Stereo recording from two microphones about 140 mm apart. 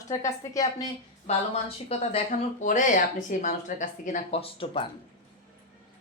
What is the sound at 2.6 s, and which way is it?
Speech, 65° left (ahead or behind).